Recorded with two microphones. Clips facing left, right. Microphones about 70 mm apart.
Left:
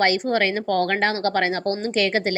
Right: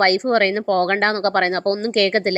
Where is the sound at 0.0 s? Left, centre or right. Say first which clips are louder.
Right 4 dB; right.